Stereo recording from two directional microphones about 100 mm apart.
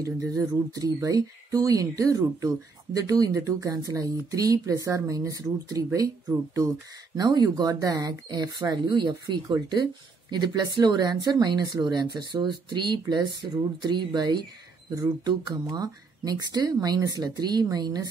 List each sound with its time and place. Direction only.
0.0 s speech: 35° right (ahead or behind)